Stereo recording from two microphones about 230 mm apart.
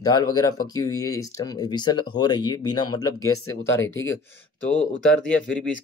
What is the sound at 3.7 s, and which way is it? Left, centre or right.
Speech, left.